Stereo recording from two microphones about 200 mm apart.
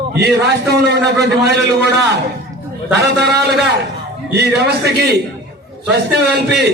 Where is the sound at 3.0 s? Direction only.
55° right (ahead or behind).